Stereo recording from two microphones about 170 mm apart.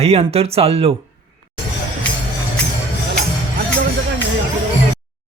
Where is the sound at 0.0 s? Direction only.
35° right (ahead or behind).